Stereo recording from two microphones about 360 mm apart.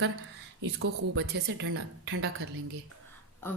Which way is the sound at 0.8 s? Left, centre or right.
Right.